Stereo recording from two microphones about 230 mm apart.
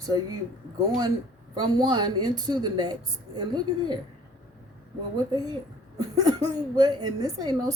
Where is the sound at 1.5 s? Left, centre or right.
Centre.